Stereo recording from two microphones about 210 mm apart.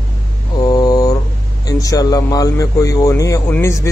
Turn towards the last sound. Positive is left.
turn(degrees=15)  # may be behind; listen again after turning